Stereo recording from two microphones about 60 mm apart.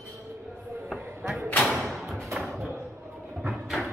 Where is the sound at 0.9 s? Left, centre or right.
Centre.